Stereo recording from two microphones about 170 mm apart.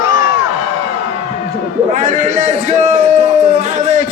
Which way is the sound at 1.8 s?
45° right (ahead or behind).